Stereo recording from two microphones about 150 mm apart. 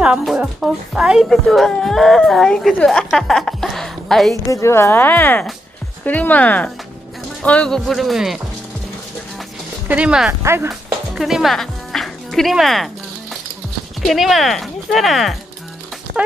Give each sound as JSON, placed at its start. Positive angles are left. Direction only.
{"t": 0.0, "sound": "speech", "side_deg": -5}
{"t": 4.5, "sound": "speech", "side_deg": 20}
{"t": 9.8, "sound": "speech", "side_deg": -10}
{"t": 10.4, "sound": "speech", "side_deg": -20}
{"t": 10.7, "sound": "music", "side_deg": -5}
{"t": 14.0, "sound": "speech", "side_deg": 0}